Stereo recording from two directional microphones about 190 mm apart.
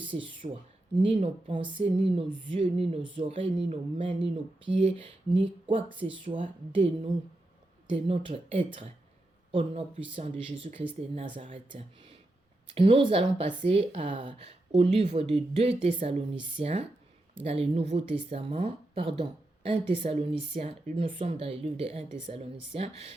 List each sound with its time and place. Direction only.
0.1 s a woman's voice: 25° right (ahead or behind)